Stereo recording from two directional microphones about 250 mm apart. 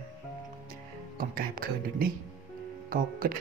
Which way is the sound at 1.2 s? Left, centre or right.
Right.